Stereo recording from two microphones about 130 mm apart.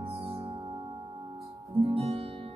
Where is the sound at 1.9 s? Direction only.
50° right (ahead or behind).